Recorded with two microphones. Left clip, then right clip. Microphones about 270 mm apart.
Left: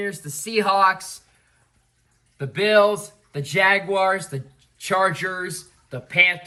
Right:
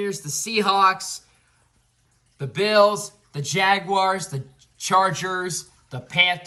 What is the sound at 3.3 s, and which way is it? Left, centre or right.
Speech, centre.